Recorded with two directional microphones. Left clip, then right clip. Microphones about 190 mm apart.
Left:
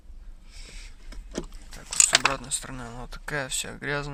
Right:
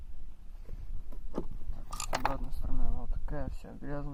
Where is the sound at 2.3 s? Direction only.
40° left (ahead or behind).